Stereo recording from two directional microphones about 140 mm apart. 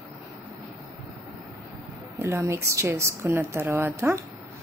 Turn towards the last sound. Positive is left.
turn(degrees=-15)  # may be behind; listen again after turning